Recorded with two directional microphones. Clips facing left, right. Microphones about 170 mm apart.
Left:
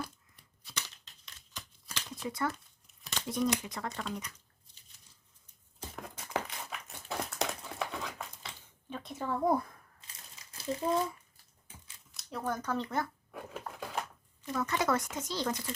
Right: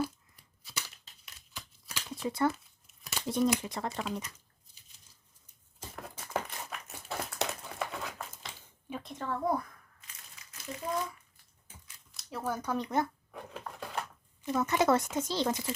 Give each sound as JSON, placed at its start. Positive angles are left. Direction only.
{"t": 0.6, "sound": "a sound", "side_deg": -10}
{"t": 2.2, "sound": "a woman's voice", "side_deg": -30}
{"t": 6.0, "sound": "crumpling", "side_deg": 0}
{"t": 9.1, "sound": "speech", "side_deg": 10}
{"t": 10.1, "sound": "crumpling", "side_deg": 30}
{"t": 12.1, "sound": "speech", "side_deg": 0}
{"t": 13.3, "sound": "a sound", "side_deg": 5}
{"t": 14.4, "sound": "a woman's voice", "side_deg": -20}